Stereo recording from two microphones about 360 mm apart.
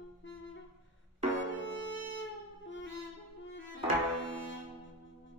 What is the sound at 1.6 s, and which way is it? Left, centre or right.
Music, left.